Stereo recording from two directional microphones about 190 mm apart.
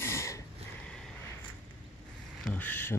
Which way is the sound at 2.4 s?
10° left (ahead or behind).